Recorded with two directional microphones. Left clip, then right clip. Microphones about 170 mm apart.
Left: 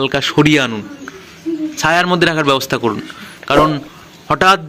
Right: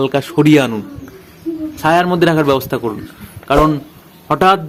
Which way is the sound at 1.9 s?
10° left (ahead or behind).